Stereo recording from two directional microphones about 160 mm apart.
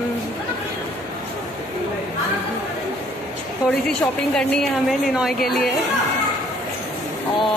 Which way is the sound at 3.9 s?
5° left (ahead or behind).